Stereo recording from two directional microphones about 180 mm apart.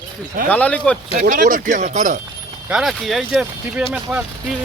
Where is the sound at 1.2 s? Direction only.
45° right (ahead or behind).